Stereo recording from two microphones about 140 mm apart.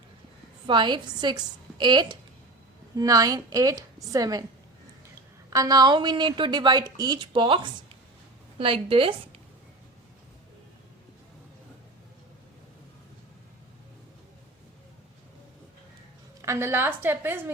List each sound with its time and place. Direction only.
0.7 s a woman's voice: 35° right (ahead or behind)
5.5 s a woman's voice: 25° right (ahead or behind)
16.4 s a woman's voice: 20° right (ahead or behind)